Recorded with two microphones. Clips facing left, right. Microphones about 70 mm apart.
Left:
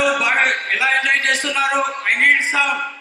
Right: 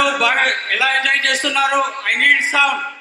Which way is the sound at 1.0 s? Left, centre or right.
Right.